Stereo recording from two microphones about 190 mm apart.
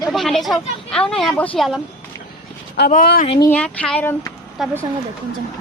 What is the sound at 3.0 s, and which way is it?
Speech, 50° left (ahead or behind).